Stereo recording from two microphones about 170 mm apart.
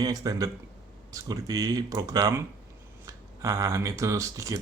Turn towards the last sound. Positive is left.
turn(degrees=-20)  # may be behind; listen again after turning